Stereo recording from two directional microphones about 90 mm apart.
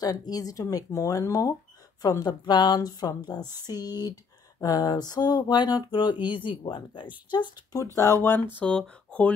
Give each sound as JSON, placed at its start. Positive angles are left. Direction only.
{"t": 0.0, "sound": "speech", "side_deg": 45}
{"t": 6.2, "sound": "speech", "side_deg": 70}
{"t": 7.7, "sound": "speech", "side_deg": 35}
{"t": 8.5, "sound": "speech", "side_deg": 15}